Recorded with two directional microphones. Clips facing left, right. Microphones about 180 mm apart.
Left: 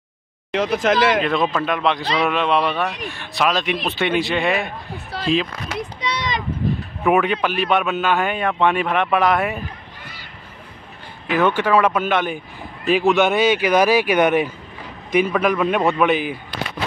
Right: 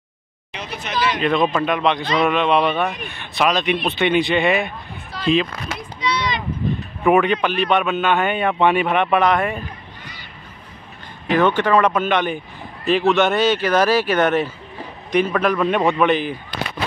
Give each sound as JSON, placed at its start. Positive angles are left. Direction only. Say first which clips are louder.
{"t": 0.5, "sound": "speech", "louder": "left 12 dB", "side_deg": 90}
{"t": 1.2, "sound": "a man's voice", "louder": "right 2 dB", "side_deg": 0}
{"t": 7.0, "sound": "a man's voice", "louder": "right 2 dB", "side_deg": 0}
{"t": 11.3, "sound": "speech", "louder": "right 1 dB", "side_deg": 10}